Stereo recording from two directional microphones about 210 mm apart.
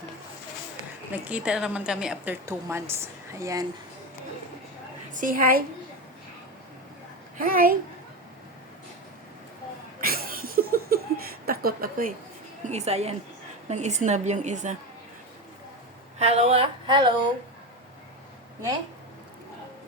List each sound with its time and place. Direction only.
1.1 s a woman's voice: 5° right (ahead or behind)
5.1 s a woman's voice: 40° right (ahead or behind)
7.3 s a woman's voice: 40° right (ahead or behind)
10.0 s laughter: 45° right (ahead or behind)
11.4 s a woman's voice: 45° right (ahead or behind)
12.6 s a woman's voice: 30° right (ahead or behind)
16.1 s speech: 30° right (ahead or behind)